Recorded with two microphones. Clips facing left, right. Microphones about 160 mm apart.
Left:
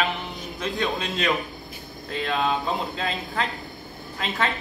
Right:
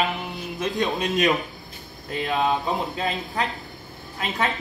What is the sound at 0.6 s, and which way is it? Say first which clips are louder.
Speech: right 2 dB; 20° right (ahead or behind).